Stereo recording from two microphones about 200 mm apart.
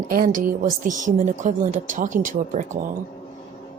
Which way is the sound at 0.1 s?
45° right (ahead or behind).